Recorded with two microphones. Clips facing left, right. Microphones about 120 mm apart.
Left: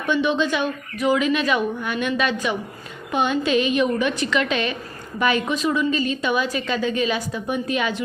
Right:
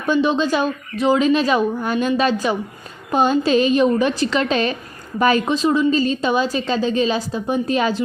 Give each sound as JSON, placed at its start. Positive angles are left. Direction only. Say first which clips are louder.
{"t": 0.0, "sound": "a woman's voice", "louder": "right 3 dB", "side_deg": -35}